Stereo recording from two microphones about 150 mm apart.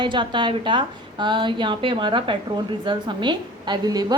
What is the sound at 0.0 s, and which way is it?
A woman's voice, 30° right (ahead or behind).